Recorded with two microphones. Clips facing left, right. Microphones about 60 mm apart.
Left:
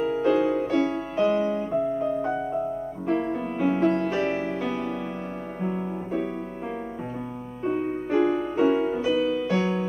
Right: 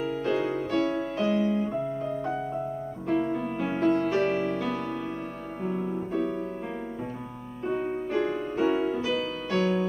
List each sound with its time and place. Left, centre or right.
0.0 s music: centre
7.6 s music: centre
9.6 s music: centre